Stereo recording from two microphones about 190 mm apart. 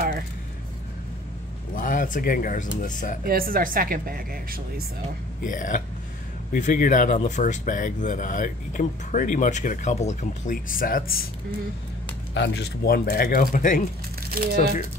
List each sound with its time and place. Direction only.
1.7 s speech: 45° left (ahead or behind)
3.3 s a woman's voice: 50° right (ahead or behind)
5.4 s speech: 45° left (ahead or behind)
12.4 s speech: 60° left (ahead or behind)
14.3 s speech: 50° right (ahead or behind)